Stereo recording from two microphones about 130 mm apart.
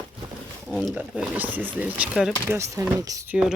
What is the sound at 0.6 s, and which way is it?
Speech, centre (ahead or behind).